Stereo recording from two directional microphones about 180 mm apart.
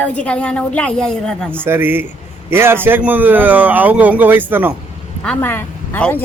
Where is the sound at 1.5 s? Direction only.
10° right (ahead or behind).